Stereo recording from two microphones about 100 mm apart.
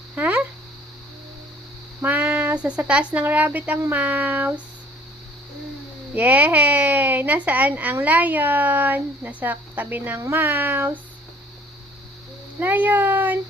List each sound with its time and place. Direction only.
0.2 s speech: 15° right (ahead or behind)
2.0 s speech: 15° right (ahead or behind)
6.1 s speech: 20° right (ahead or behind)
12.5 s a child's voice: 15° right (ahead or behind)